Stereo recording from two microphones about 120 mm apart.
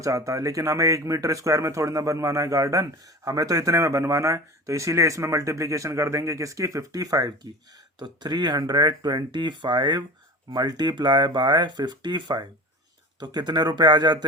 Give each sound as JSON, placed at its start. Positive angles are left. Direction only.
{"t": 0.0, "sound": "speech", "side_deg": -30}